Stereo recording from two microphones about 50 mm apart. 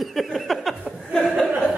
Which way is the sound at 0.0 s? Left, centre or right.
Centre.